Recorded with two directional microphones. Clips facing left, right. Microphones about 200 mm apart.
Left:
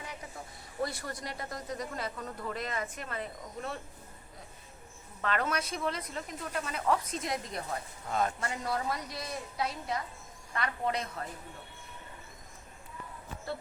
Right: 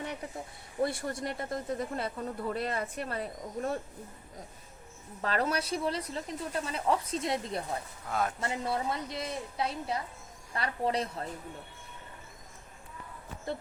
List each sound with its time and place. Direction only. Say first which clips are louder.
0.8 s a woman's voice: right 5 dB; 25° right (ahead or behind)
5.2 s speech: right 2 dB; 35° right (ahead or behind)
8.0 s a man's voice: left 1 dB; centre (ahead or behind)
8.4 s a woman's voice: right 2 dB; 25° right (ahead or behind)